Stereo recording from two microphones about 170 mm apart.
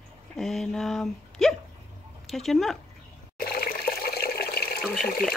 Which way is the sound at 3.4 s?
65° left (ahead or behind).